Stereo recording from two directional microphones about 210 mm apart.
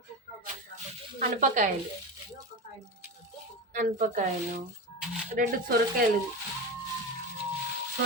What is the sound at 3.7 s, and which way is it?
Speech, 40° right (ahead or behind).